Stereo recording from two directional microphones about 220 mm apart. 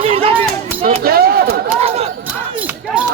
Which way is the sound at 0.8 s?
45° right (ahead or behind).